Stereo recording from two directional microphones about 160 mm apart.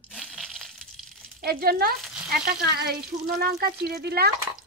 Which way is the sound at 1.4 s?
70° right (ahead or behind).